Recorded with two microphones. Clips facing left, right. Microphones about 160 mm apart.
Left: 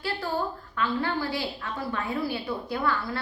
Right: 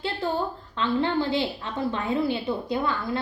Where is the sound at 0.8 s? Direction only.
25° right (ahead or behind).